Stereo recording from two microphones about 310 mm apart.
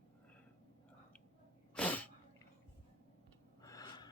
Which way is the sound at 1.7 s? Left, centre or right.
Centre.